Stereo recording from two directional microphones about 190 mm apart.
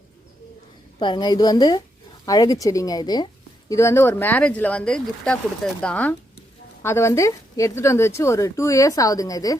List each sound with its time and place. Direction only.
0.9 s speech: 25° left (ahead or behind)